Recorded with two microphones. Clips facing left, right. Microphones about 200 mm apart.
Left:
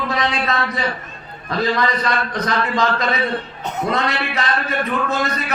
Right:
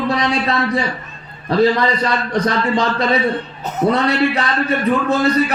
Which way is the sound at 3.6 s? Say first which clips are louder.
Right 3 dB; 5° right (ahead or behind).